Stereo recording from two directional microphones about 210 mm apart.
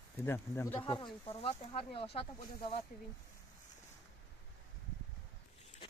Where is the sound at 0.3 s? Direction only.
10° left (ahead or behind).